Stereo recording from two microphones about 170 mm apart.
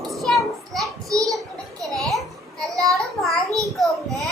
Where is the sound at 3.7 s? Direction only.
Centre (ahead or behind).